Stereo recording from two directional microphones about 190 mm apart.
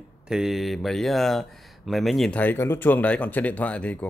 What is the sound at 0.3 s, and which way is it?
Speech, centre (ahead or behind).